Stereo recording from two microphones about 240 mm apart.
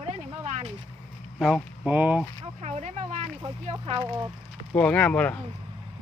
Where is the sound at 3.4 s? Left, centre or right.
Right.